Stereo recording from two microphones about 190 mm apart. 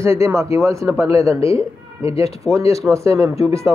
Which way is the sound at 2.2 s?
35° left (ahead or behind).